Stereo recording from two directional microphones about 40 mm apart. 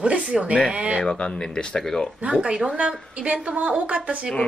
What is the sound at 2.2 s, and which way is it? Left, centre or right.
A woman's voice, right.